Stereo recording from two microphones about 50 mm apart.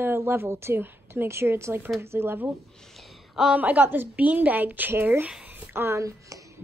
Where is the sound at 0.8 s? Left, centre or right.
Right.